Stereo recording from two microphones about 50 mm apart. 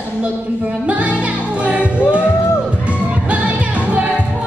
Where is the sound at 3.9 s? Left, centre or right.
Right.